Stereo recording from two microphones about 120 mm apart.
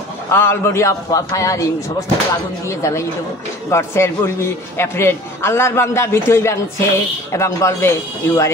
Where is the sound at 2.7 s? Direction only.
25° left (ahead or behind).